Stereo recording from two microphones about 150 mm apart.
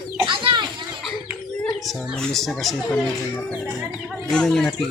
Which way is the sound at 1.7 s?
Centre (ahead or behind).